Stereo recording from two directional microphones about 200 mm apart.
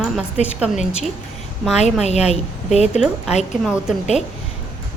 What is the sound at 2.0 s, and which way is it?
Speech, 35° left (ahead or behind).